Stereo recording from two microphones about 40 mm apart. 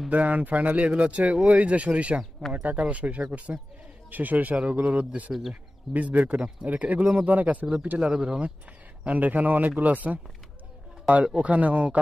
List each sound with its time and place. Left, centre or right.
0.1 s speech: right
8.0 s speech: centre
9.0 s speech: right
11.3 s speech: right